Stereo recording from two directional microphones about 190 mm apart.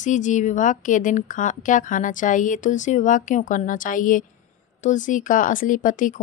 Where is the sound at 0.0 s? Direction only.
40° left (ahead or behind).